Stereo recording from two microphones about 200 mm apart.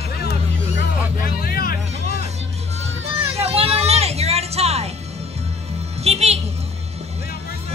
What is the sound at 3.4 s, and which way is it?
Music, 30° right (ahead or behind).